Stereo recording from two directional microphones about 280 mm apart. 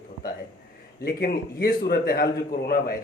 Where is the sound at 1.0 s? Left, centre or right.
Left.